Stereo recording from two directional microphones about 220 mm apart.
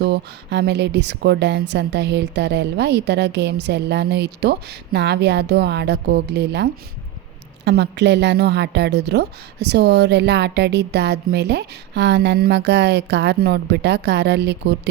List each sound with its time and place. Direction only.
0.0 s a woman's voice: 50° right (ahead or behind)